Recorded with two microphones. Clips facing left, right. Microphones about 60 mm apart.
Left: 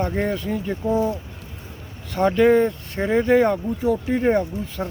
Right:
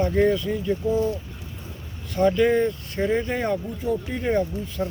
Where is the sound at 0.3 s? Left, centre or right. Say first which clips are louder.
Right 1 dB; left.